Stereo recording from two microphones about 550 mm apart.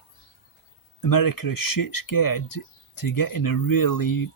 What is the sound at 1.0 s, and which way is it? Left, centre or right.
Speech, left.